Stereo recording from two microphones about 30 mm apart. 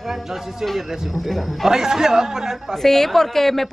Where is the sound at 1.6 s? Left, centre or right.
Centre.